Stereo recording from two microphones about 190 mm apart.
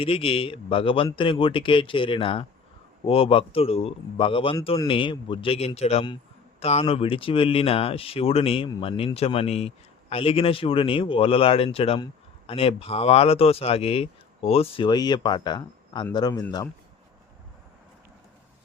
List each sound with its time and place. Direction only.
0.0 s speech: 30° left (ahead or behind)